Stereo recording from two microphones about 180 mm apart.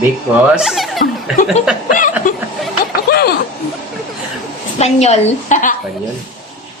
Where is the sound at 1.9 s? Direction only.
45° left (ahead or behind).